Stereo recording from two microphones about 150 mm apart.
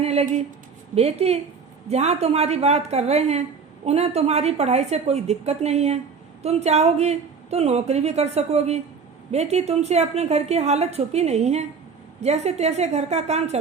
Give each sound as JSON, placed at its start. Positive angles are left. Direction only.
{"t": 0.0, "sound": "a woman's voice", "side_deg": -45}